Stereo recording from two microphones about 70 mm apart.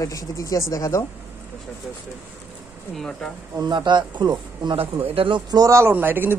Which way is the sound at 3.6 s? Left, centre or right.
Right.